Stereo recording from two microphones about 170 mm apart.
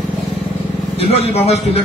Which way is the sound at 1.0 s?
35° left (ahead or behind).